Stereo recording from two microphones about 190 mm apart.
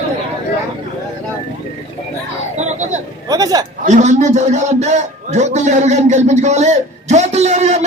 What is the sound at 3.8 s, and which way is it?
A man's voice, 40° right (ahead or behind).